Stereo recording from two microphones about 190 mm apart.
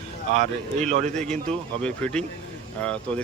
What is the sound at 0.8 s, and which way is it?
Speech, 35° right (ahead or behind).